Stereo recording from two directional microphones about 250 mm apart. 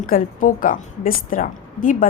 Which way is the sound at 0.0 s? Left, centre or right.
Left.